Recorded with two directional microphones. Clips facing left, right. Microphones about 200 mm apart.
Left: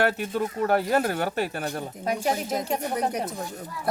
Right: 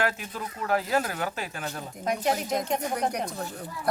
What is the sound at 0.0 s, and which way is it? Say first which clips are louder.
Speech: left 6 dB; 60° left (ahead or behind).